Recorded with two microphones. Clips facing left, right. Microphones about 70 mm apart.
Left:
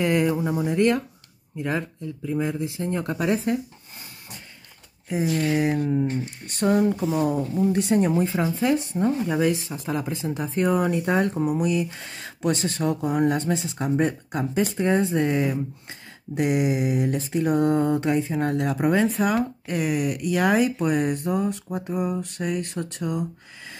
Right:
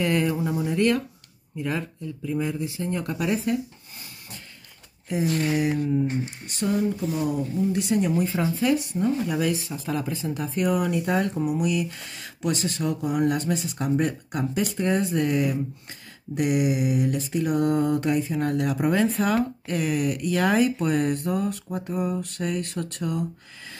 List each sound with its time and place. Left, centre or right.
0.0 s speech: left
5.2 s speech: right
5.6 s speech: left
6.0 s speech: right
6.4 s speech: left; by 23.2 s centre